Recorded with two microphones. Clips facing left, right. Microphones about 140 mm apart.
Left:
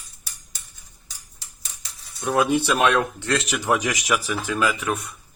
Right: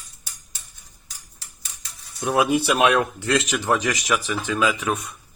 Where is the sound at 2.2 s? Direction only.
5° right (ahead or behind).